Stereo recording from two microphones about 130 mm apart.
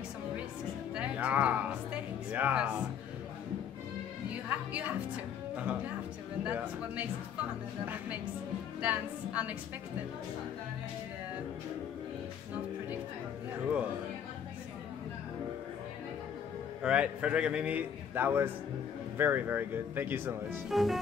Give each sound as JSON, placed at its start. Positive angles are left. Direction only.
{"t": 0.9, "sound": "music", "side_deg": -10}
{"t": 4.5, "sound": "a man's voice", "side_deg": -10}
{"t": 6.4, "sound": "a man's voice", "side_deg": -10}
{"t": 16.8, "sound": "a man's voice", "side_deg": -10}
{"t": 20.7, "sound": "music", "side_deg": 0}